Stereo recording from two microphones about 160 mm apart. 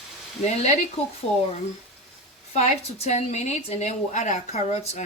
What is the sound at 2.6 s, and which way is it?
A woman's voice, 45° left (ahead or behind).